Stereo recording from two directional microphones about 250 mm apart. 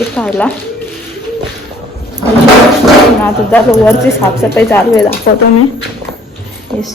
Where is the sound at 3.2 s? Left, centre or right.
Centre.